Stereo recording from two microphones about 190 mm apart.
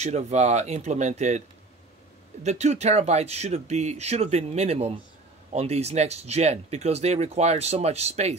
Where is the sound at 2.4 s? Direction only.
35° right (ahead or behind).